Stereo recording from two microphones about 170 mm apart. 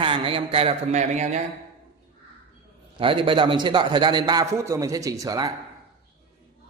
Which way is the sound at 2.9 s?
30° right (ahead or behind).